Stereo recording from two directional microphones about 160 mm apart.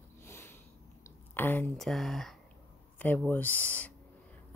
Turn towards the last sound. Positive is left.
turn(degrees=10)  # may be behind; listen again after turning